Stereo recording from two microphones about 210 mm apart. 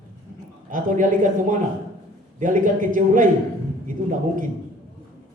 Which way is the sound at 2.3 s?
40° right (ahead or behind).